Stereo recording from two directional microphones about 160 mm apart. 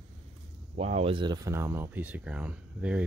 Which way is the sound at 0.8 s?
40° right (ahead or behind).